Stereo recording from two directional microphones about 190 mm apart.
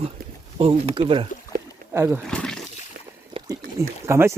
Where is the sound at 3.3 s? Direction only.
25° right (ahead or behind).